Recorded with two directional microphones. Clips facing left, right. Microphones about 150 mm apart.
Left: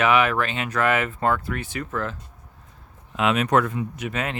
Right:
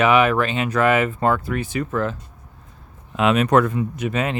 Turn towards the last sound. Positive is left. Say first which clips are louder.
# right 5 dB
turn(degrees=-25)  # may be behind; listen again after turning